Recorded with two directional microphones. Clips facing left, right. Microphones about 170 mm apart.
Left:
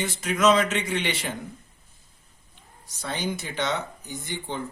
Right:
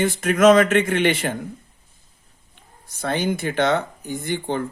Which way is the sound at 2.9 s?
55° right (ahead or behind).